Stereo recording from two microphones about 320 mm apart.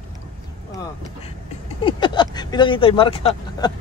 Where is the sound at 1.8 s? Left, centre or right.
Centre.